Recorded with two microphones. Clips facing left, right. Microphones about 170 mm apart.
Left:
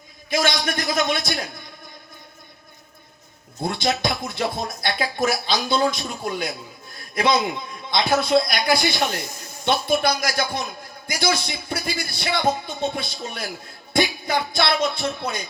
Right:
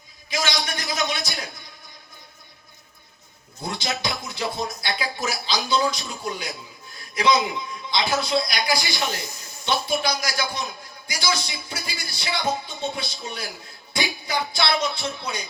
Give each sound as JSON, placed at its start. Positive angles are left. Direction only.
{"t": 0.3, "sound": "a man's voice", "side_deg": 55}
{"t": 3.6, "sound": "a man's voice", "side_deg": 55}
{"t": 13.9, "sound": "music", "side_deg": 55}